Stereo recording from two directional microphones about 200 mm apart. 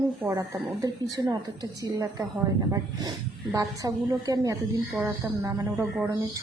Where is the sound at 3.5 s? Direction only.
15° right (ahead or behind).